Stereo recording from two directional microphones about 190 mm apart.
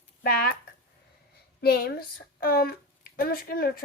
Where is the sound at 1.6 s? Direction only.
55° left (ahead or behind).